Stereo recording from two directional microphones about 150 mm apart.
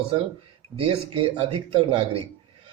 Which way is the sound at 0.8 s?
40° right (ahead or behind).